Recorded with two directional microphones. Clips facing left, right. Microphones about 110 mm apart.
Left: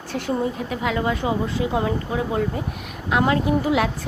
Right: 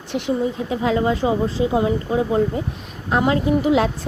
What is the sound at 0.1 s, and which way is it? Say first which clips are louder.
Speech: right 2 dB; 20° right (ahead or behind).